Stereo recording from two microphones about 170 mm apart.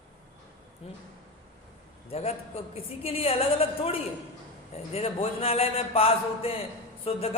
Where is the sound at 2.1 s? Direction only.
35° left (ahead or behind).